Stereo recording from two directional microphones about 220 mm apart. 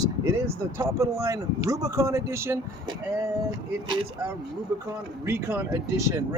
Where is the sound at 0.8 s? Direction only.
15° right (ahead or behind).